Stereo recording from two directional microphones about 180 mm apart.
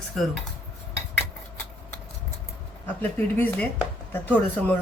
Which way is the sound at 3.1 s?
10° left (ahead or behind).